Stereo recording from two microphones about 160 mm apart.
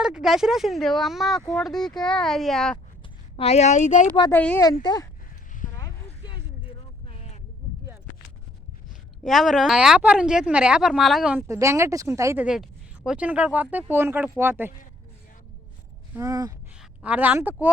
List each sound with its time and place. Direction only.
0.0 s a woman's voice: 5° right (ahead or behind)
3.3 s speech: 40° left (ahead or behind)
4.3 s a woman's voice: 10° left (ahead or behind)
4.8 s speech: 25° left (ahead or behind)
5.8 s a sound: 25° left (ahead or behind)
7.1 s a sound: 40° left (ahead or behind)
9.2 s a woman's voice: centre (ahead or behind)
11.3 s speech: 15° right (ahead or behind)
12.5 s speech: 5° right (ahead or behind)
16.1 s gasp: 20° right (ahead or behind)
17.0 s speech: 10° right (ahead or behind)